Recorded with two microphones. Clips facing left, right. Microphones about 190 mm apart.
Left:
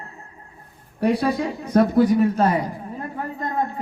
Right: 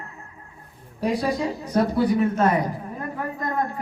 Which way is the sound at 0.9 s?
60° left (ahead or behind).